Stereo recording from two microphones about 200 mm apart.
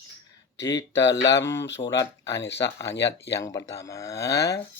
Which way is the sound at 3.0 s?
60° left (ahead or behind).